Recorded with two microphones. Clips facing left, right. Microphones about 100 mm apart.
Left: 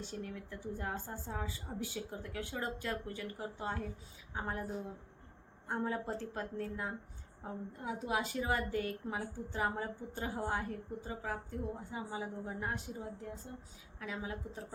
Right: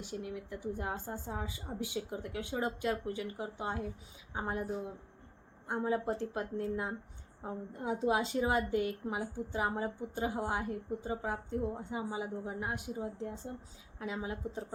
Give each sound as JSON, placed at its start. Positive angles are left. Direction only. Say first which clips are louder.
{"t": 0.0, "sound": "a woman's voice", "louder": "right 3 dB", "side_deg": -15}
{"t": 5.6, "sound": "a woman's voice", "louder": "right 4 dB", "side_deg": -15}
{"t": 13.1, "sound": "a woman's voice", "louder": "right 5 dB", "side_deg": -25}